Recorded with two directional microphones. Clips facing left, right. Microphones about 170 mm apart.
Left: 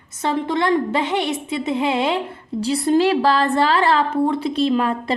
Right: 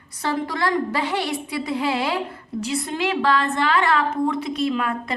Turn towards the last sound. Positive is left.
turn(degrees=30)  # may be behind; listen again after turning